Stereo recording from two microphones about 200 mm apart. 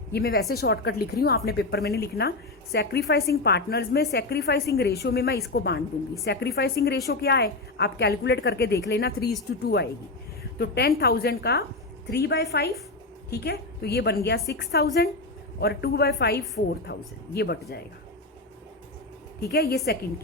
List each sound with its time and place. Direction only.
0.1 s a woman's voice: 50° left (ahead or behind)
3.3 s a woman's voice: 55° left (ahead or behind)
19.5 s a woman's voice: 50° left (ahead or behind)